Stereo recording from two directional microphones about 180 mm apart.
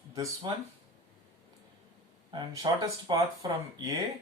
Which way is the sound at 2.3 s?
25° right (ahead or behind).